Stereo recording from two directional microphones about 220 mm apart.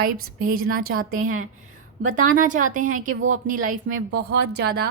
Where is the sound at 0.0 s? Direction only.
40° right (ahead or behind).